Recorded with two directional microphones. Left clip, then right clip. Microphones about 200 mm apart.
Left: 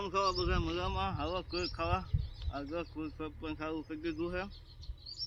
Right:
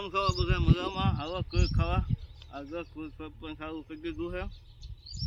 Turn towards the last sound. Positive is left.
turn(degrees=0)  # may be behind; listen again after turning